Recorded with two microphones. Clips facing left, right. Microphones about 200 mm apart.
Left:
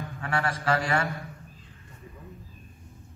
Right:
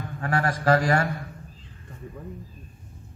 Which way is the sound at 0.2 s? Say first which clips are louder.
Right 4 dB; 40° right (ahead or behind).